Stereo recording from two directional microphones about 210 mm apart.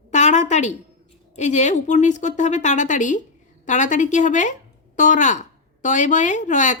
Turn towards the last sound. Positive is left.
turn(degrees=35)  # may be behind; listen again after turning